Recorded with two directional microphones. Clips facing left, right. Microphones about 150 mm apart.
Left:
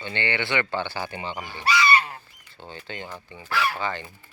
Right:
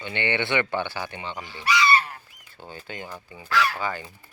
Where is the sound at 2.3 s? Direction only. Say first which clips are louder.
Even; 10° right (ahead or behind).